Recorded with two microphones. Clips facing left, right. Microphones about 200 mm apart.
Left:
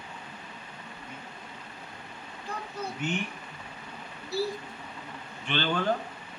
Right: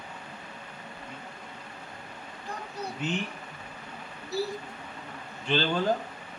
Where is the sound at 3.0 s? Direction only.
35° right (ahead or behind).